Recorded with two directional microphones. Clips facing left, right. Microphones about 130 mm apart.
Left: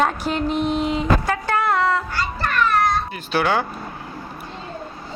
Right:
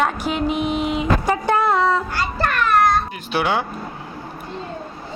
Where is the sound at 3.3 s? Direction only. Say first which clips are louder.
Left 1 dB; 15° right (ahead or behind).